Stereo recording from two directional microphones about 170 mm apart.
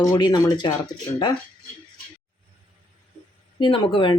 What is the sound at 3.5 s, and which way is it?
Speech, 30° left (ahead or behind).